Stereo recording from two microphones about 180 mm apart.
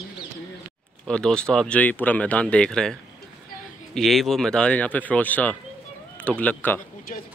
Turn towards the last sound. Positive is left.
turn(degrees=10)  # may be behind; listen again after turning